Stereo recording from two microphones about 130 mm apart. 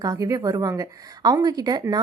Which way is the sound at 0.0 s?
25° right (ahead or behind).